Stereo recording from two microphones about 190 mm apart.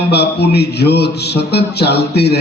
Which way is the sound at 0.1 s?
60° left (ahead or behind).